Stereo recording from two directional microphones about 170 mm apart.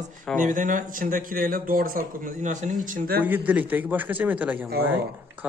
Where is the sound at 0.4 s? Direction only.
50° right (ahead or behind).